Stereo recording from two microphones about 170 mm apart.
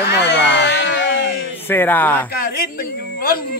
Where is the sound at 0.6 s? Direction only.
90° left.